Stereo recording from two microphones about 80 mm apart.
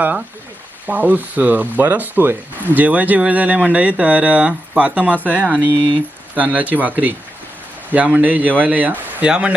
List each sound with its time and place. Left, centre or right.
0.9 s speech: right